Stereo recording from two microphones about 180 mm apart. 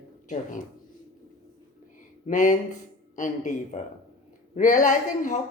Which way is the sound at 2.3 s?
45° left (ahead or behind).